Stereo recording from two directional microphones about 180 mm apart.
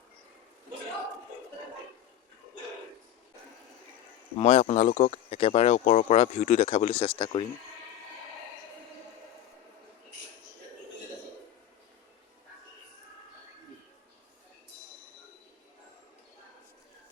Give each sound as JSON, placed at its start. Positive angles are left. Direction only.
{"t": 4.4, "sound": "speech", "side_deg": 35}
{"t": 4.9, "sound": "speech", "side_deg": 55}
{"t": 5.3, "sound": "speech", "side_deg": 35}